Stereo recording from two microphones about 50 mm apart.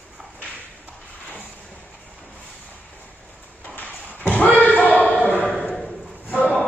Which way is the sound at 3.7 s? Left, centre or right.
Left.